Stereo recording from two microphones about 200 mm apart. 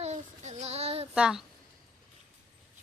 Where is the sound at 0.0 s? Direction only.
35° right (ahead or behind).